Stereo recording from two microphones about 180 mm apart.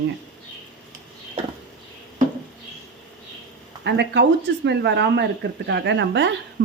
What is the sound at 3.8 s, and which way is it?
A woman's voice, 75° right (ahead or behind).